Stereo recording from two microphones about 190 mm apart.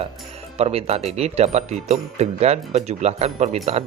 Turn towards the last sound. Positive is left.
turn(degrees=-35)  # may be behind; listen again after turning